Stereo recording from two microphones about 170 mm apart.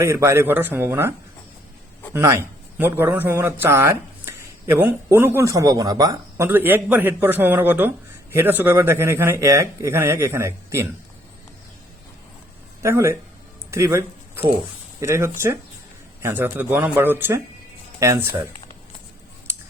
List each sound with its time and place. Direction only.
0.0 s a man's voice: 15° right (ahead or behind)
2.1 s a man's voice: 15° right (ahead or behind)
12.8 s a man's voice: 15° right (ahead or behind)
13.7 s a sound: 15° right (ahead or behind)
15.0 s a man's voice: 15° right (ahead or behind)